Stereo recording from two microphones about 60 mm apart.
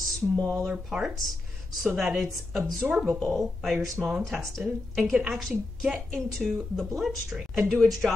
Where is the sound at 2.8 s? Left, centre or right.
Centre.